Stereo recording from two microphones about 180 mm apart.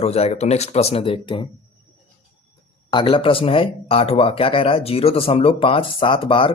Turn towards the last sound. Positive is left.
turn(degrees=30)  # may be behind; listen again after turning